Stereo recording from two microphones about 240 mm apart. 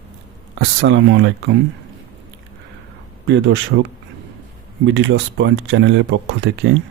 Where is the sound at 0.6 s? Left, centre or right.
Right.